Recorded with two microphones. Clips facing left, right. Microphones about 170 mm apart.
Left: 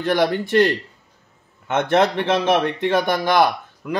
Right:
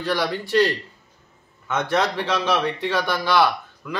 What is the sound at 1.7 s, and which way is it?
Speech, 55° left (ahead or behind).